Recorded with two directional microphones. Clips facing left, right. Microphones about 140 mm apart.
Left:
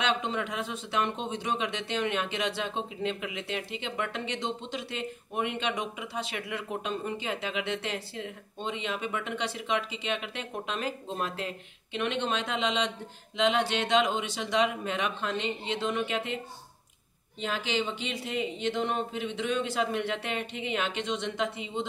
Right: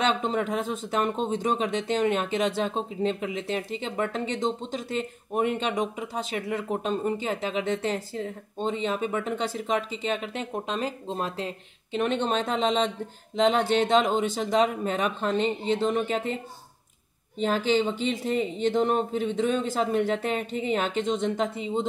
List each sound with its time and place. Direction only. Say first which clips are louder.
0.0 s speech: right 4 dB; 40° right (ahead or behind)
17.4 s speech: right 7 dB; 45° right (ahead or behind)